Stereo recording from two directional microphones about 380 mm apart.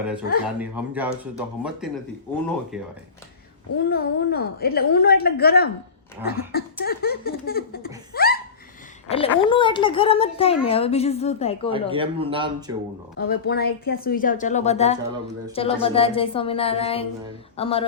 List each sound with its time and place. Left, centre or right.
0.4 s speech: centre
3.8 s a woman's voice: left
8.1 s laughter: left
9.0 s speech: centre
11.7 s a man's voice: centre
13.1 s a woman's voice: left